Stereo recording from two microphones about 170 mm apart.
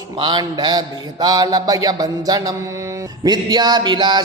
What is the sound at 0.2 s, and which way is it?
Mantra, 25° right (ahead or behind).